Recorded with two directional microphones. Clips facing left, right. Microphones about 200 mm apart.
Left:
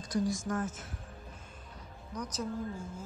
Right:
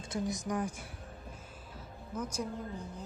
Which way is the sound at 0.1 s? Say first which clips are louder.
Left 3 dB; 20° right (ahead or behind).